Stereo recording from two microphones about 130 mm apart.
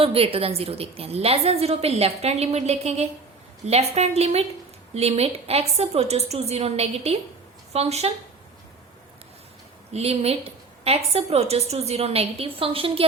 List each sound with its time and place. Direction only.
0.0 s a woman's voice: 45° right (ahead or behind)
9.9 s a woman's voice: 50° right (ahead or behind)